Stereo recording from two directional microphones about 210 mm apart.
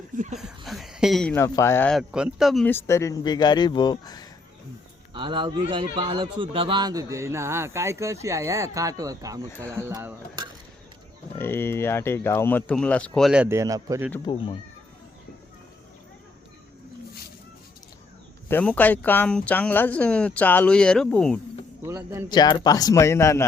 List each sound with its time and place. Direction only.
0.3 s speech: centre (ahead or behind); by 4.3 s 20° left (ahead or behind)
5.1 s a man's voice: 25° right (ahead or behind)
11.3 s speech: 10° left (ahead or behind); by 14.1 s 15° right (ahead or behind)
18.4 s speech: 5° left (ahead or behind)
21.8 s a man's voice: 15° right (ahead or behind)
22.3 s speech: 20° left (ahead or behind)